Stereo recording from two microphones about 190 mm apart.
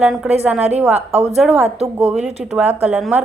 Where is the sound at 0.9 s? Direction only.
35° right (ahead or behind).